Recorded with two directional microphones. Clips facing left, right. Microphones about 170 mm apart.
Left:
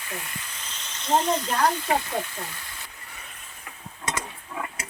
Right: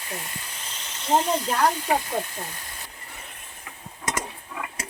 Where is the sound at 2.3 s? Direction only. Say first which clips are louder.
Right 1 dB; 40° right (ahead or behind).